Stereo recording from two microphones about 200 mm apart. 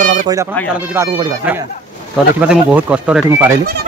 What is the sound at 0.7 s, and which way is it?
Speech, 10° right (ahead or behind).